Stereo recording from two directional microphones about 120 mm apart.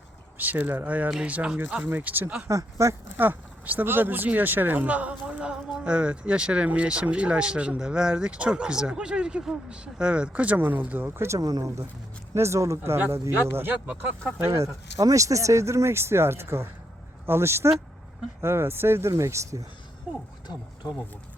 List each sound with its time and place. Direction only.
0.3 s speech: 15° right (ahead or behind)
2.5 s speech: 25° right (ahead or behind)
11.3 s speech: 30° right (ahead or behind)